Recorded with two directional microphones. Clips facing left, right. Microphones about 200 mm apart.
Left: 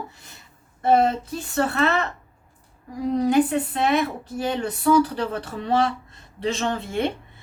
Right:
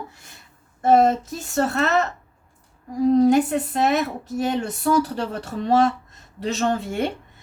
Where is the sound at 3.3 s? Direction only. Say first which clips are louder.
Right 1 dB; 45° right (ahead or behind).